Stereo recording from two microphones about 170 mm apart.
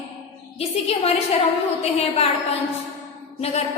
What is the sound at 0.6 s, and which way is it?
A woman's voice, 35° left (ahead or behind).